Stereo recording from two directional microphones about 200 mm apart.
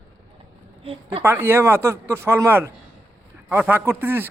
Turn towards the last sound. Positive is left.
turn(degrees=-10)  # may be behind; listen again after turning